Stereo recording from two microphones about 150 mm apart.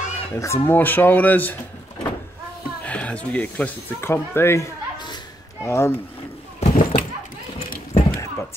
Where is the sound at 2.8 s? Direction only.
10° left (ahead or behind).